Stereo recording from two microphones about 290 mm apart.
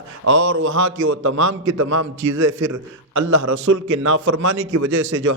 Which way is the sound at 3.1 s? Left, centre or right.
Right.